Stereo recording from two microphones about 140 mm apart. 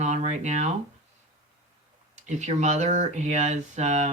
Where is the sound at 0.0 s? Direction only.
55° right (ahead or behind).